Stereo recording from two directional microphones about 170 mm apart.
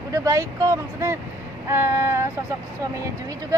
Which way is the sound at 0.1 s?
20° right (ahead or behind).